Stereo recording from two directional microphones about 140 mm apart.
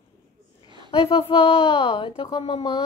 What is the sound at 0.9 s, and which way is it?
Speech, 40° left (ahead or behind).